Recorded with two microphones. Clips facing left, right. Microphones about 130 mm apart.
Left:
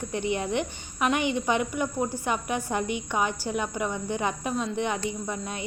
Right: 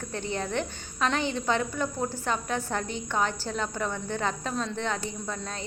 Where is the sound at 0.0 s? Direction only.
15° left (ahead or behind).